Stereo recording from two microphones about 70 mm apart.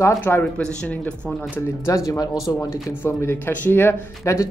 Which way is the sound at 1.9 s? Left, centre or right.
Left.